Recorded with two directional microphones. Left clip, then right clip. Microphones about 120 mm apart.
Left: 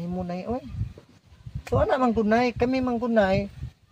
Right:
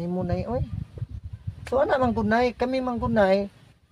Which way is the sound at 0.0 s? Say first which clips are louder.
Right 3 dB; 30° right (ahead or behind).